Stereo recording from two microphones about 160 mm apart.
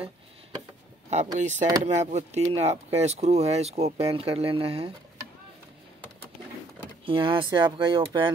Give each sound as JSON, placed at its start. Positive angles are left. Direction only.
{"t": 1.1, "sound": "speech", "side_deg": -45}
{"t": 7.1, "sound": "speech", "side_deg": -35}